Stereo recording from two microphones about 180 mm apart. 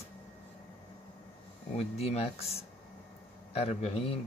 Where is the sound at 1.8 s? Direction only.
35° left (ahead or behind).